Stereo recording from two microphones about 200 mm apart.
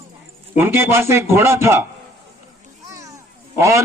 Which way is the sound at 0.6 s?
10° right (ahead or behind).